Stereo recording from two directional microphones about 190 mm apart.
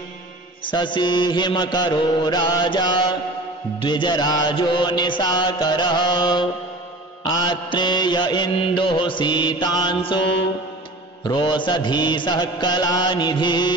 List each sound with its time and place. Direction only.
0.7 s mantra: 25° left (ahead or behind)
11.2 s mantra: 25° left (ahead or behind)